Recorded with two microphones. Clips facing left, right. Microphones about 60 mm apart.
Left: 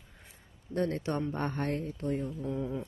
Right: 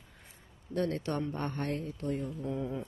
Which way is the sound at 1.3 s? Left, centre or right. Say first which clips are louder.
Left 2 dB; left.